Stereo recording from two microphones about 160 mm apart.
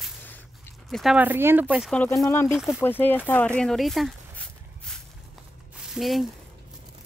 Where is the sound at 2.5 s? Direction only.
Centre (ahead or behind).